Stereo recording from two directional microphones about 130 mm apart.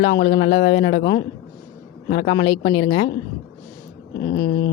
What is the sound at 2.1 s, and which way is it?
Speech, 55° left (ahead or behind).